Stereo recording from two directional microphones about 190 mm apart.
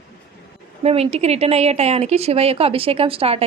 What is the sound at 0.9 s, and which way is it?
A woman's voice, 35° right (ahead or behind).